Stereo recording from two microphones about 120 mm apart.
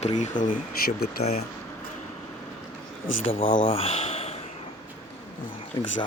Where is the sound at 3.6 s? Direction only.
55° left (ahead or behind).